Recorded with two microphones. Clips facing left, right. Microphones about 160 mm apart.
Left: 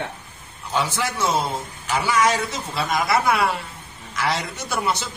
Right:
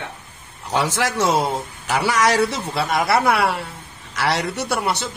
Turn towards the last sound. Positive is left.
turn(degrees=-70)  # may be behind; listen again after turning